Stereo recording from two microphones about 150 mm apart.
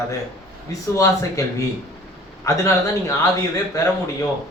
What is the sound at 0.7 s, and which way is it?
Speech, 20° left (ahead or behind).